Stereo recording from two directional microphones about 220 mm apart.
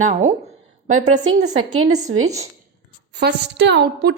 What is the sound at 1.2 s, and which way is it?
Speech, 65° right (ahead or behind).